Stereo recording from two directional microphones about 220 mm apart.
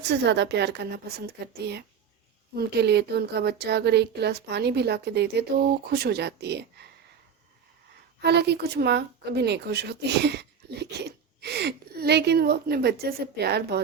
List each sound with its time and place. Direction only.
0.0 s a woman's voice: 50° right (ahead or behind)
2.6 s a woman's voice: 50° right (ahead or behind)
8.2 s speech: 50° right (ahead or behind)